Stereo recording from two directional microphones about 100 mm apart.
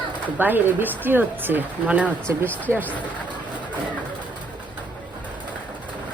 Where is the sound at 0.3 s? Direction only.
20° right (ahead or behind).